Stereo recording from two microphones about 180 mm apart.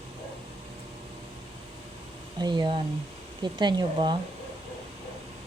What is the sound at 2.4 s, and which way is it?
Speech, 25° right (ahead or behind).